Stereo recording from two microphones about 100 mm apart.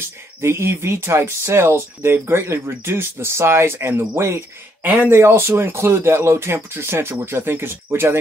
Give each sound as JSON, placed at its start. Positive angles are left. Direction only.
{"t": 0.4, "sound": "speech", "side_deg": -25}